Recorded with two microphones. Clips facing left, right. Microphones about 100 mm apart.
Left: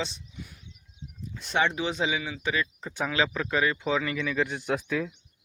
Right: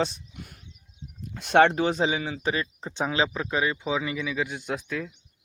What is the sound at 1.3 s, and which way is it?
Speech, 70° right (ahead or behind).